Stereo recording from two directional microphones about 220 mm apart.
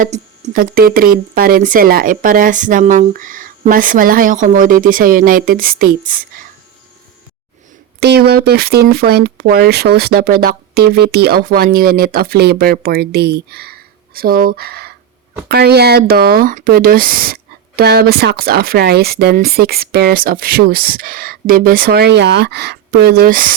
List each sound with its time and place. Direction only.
0.0 s speech: 35° right (ahead or behind)
7.9 s speech: 50° right (ahead or behind)